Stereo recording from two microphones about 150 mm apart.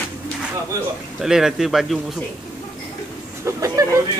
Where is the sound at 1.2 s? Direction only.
5° right (ahead or behind).